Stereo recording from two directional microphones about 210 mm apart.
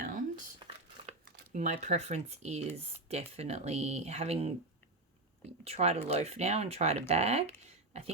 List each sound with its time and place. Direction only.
0.0 s a sound: 40° right (ahead or behind)
0.6 s crumpling: 20° right (ahead or behind)
1.0 s speech: 35° right (ahead or behind)
5.6 s speech: 30° right (ahead or behind)